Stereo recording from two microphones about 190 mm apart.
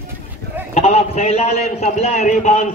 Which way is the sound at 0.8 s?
35° left (ahead or behind).